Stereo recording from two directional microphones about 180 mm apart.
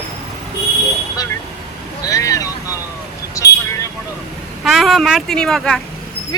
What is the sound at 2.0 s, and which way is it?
Speech, 20° left (ahead or behind).